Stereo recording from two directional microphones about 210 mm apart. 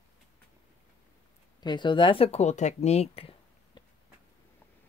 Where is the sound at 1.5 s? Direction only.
20° left (ahead or behind).